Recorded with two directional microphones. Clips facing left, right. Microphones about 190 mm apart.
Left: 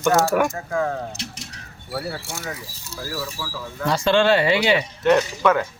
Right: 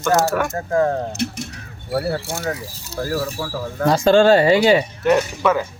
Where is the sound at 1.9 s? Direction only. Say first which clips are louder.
Right 7 dB; 55° right (ahead or behind).